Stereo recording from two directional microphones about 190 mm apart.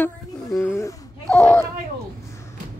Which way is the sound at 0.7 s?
10° left (ahead or behind).